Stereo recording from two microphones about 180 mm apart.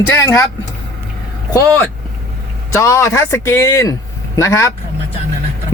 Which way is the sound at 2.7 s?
15° left (ahead or behind).